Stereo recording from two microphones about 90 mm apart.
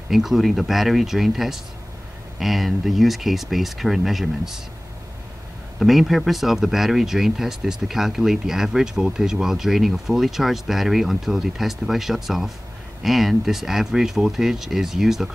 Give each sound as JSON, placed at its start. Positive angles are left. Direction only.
{"t": 0.1, "sound": "speech", "side_deg": -5}
{"t": 5.8, "sound": "speech", "side_deg": 0}